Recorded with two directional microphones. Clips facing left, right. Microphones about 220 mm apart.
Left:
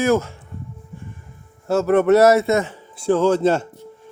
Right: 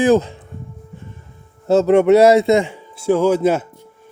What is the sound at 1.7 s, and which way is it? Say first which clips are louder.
A man's voice: right 3 dB; 20° right (ahead or behind).